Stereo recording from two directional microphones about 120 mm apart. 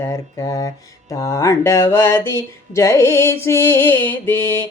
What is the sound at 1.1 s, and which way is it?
Mantra, 25° left (ahead or behind).